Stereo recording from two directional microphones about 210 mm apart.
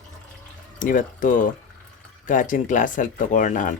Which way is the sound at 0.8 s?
40° left (ahead or behind).